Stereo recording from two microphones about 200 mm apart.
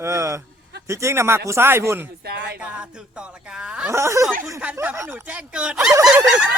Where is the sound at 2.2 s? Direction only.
50° right (ahead or behind).